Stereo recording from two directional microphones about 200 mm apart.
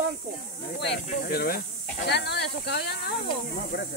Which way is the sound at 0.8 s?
55° left (ahead or behind).